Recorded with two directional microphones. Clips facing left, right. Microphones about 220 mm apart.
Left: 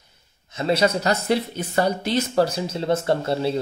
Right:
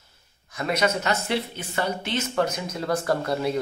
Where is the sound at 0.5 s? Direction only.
25° left (ahead or behind).